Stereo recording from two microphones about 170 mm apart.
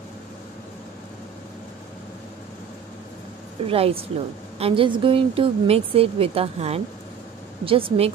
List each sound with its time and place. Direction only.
3.6 s speech: 35° right (ahead or behind)